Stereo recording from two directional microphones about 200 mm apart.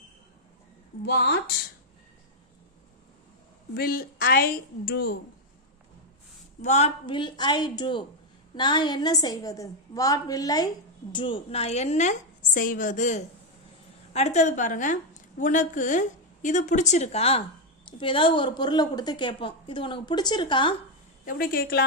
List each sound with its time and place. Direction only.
1.0 s a woman's voice: 55° left (ahead or behind)
3.8 s a woman's voice: 45° left (ahead or behind)
6.6 s a woman's voice: 35° left (ahead or behind)
21.2 s a woman's voice: 45° left (ahead or behind)